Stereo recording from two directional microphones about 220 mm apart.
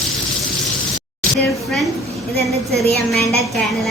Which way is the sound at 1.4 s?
Centre (ahead or behind).